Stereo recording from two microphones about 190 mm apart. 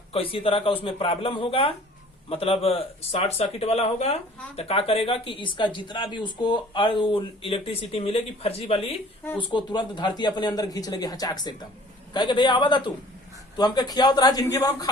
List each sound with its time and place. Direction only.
0.1 s speech: 30° left (ahead or behind)